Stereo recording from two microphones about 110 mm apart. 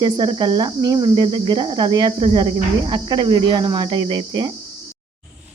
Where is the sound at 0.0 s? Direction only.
45° right (ahead or behind).